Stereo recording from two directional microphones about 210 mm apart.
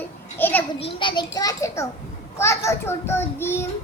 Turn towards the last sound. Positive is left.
turn(degrees=10)  # may be behind; listen again after turning